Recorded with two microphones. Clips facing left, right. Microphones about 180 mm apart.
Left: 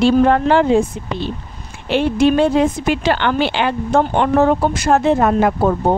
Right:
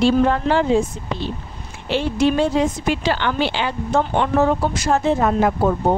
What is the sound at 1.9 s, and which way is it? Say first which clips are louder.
Speech: left 4 dB; 60° left (ahead or behind).